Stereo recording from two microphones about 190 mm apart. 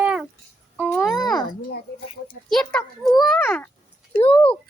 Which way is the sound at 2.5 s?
Centre (ahead or behind).